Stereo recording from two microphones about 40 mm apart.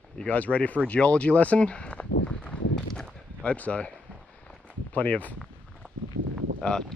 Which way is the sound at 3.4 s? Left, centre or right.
Left.